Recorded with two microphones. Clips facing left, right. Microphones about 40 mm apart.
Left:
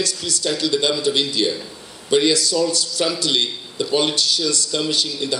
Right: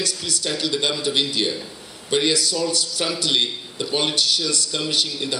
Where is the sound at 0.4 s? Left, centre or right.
Right.